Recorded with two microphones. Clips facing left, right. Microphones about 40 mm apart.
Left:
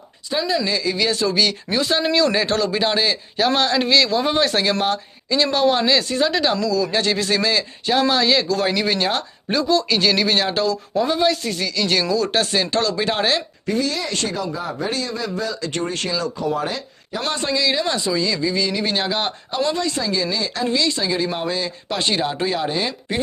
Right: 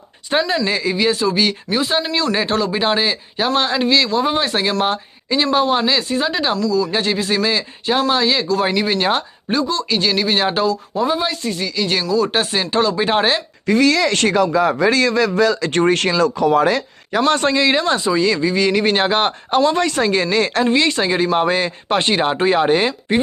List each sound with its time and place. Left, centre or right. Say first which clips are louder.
0.3 s speech: right 3 dB; right
0.9 s speech: right 2 dB; centre
4.8 s speech: right 2 dB; right
5.5 s speech: right 1 dB; centre
8.1 s speech: right 1 dB; centre
8.6 s speech: right 2 dB; centre
9.5 s speech: left 1 dB; centre
10.4 s speech: right 3 dB; centre
13.7 s a man's voice: right 9 dB; right
15.7 s speech: right 8 dB; right
17.2 s speech: right 5 dB; right
20.7 s speech: right 5 dB; right
22.9 s speech: right 6 dB; right